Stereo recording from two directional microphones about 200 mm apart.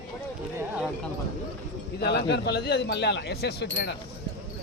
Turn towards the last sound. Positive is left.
turn(degrees=55)  # may be behind; listen again after turning